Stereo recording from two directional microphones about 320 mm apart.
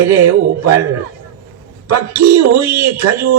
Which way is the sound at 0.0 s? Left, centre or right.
Right.